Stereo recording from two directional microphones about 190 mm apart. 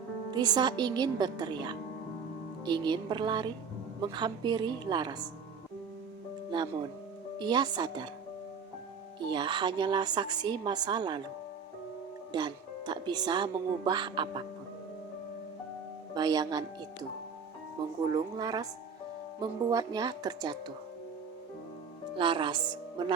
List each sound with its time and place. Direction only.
0.3 s speech: 20° right (ahead or behind)
6.5 s speech: 25° right (ahead or behind)
9.2 s speech: 25° right (ahead or behind)
12.3 s speech: 25° right (ahead or behind)
16.1 s speech: 20° right (ahead or behind)
22.1 s a woman's voice: 25° right (ahead or behind)